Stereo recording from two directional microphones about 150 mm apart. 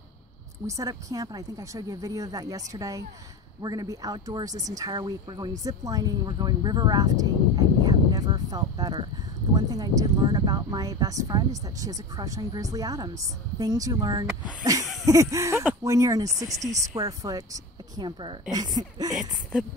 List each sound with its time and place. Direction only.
0.7 s speech: 20° right (ahead or behind)